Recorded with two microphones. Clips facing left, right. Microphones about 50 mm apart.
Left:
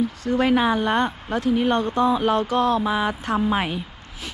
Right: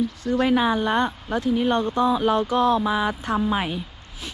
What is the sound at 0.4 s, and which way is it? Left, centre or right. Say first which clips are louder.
Speech: left 1 dB; left.